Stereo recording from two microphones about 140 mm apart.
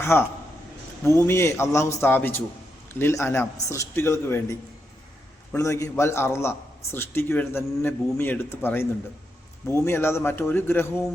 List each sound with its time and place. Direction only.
0.0 s a man's voice: 15° left (ahead or behind)
5.5 s a man's voice: 20° left (ahead or behind)